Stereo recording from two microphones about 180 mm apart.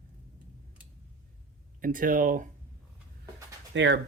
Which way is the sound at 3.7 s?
80° right.